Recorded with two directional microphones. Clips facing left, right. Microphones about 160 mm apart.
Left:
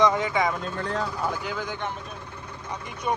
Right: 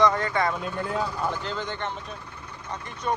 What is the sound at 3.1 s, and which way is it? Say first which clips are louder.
Speech: even; 10° left (ahead or behind).